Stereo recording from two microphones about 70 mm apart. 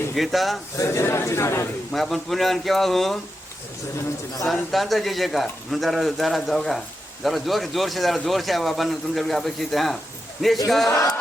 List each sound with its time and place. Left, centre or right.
0.1 s speech: centre
0.8 s speech: left
1.9 s speech: centre
4.7 s speech: centre
10.8 s a sound: left